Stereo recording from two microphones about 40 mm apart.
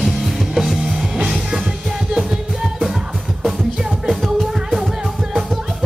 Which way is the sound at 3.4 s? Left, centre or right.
Centre.